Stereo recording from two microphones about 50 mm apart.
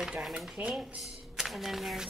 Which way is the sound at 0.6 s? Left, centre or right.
Right.